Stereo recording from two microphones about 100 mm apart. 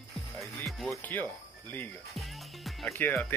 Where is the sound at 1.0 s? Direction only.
20° left (ahead or behind).